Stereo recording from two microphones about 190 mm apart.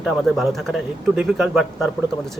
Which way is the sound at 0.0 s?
Centre (ahead or behind).